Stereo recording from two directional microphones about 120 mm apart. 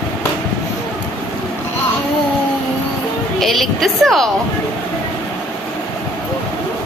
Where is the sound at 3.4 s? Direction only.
Centre (ahead or behind).